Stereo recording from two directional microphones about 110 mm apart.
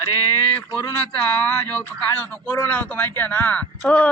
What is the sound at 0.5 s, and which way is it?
Speech, 20° left (ahead or behind).